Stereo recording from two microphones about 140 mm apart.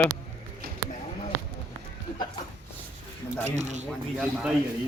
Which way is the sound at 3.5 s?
55° right (ahead or behind).